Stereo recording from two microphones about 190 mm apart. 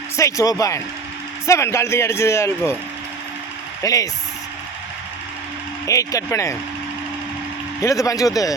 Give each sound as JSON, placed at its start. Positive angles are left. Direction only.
{"t": 0.2, "sound": "speech", "side_deg": 15}
{"t": 3.8, "sound": "speech", "side_deg": 20}
{"t": 5.8, "sound": "speech", "side_deg": 15}
{"t": 7.8, "sound": "speech", "side_deg": 15}